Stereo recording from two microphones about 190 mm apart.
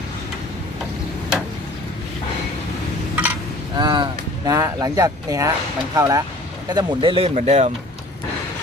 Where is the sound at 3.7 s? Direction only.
25° right (ahead or behind).